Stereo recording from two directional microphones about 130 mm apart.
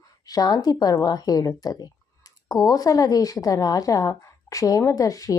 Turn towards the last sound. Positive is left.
turn(degrees=25)  # may be behind; listen again after turning